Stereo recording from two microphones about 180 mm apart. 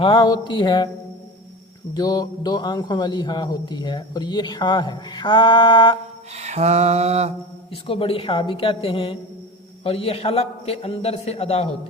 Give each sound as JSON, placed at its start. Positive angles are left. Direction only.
{"t": 0.0, "sound": "a man's voice", "side_deg": 25}
{"t": 1.9, "sound": "a man's voice", "side_deg": 20}
{"t": 6.3, "sound": "mantra", "side_deg": -35}
{"t": 7.7, "sound": "a man's voice", "side_deg": 30}